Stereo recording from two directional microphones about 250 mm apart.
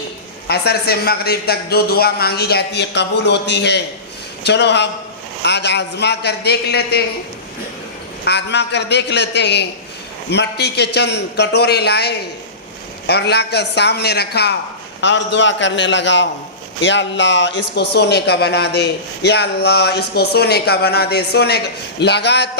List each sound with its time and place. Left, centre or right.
0.4 s a man's voice: left
8.2 s a man's voice: left